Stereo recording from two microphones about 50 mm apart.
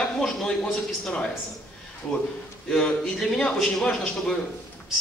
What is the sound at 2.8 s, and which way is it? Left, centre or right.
A woman's voice, centre.